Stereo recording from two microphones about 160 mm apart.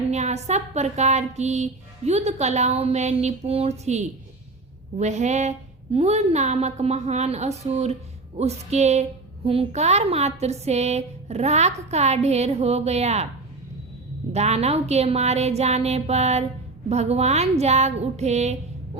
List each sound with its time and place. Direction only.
0.1 s a woman's voice: 45° right (ahead or behind)
14.3 s a woman's voice: 40° right (ahead or behind)